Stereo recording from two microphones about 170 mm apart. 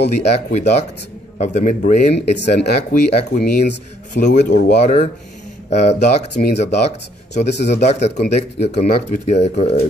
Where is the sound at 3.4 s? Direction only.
75° left (ahead or behind).